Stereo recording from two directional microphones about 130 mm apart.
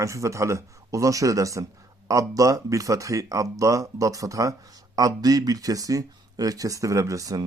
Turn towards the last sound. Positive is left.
turn(degrees=-25)  # may be behind; listen again after turning